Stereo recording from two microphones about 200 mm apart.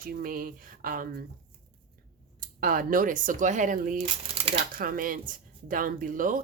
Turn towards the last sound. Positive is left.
turn(degrees=-40)  # may be behind; listen again after turning